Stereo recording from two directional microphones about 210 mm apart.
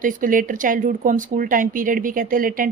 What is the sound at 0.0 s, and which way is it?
Speech, 40° right (ahead or behind).